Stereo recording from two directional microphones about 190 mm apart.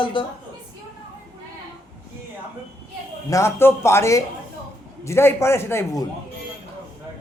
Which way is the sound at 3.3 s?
15° left (ahead or behind).